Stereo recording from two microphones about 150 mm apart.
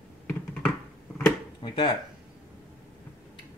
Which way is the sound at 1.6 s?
30° left (ahead or behind).